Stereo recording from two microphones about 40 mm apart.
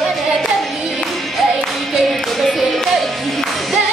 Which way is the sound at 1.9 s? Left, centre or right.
Centre.